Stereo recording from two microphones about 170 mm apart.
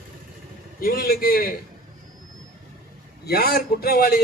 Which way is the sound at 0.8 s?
60° left (ahead or behind).